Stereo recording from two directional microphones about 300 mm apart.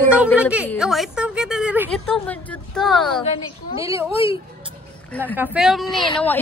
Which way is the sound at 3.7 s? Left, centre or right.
Centre.